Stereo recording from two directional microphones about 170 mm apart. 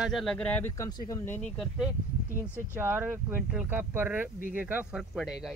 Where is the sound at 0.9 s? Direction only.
20° left (ahead or behind).